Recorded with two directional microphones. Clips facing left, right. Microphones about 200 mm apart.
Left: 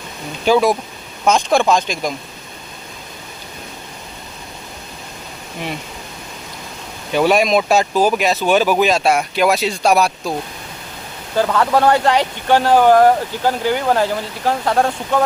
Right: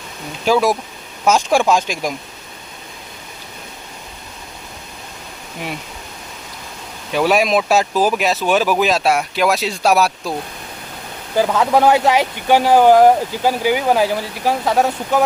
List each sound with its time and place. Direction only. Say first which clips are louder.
0.4 s speech: left 1 dB; centre (ahead or behind)
7.1 s speech: left 1 dB; centre (ahead or behind)
11.3 s speech: right 1 dB; 10° right (ahead or behind)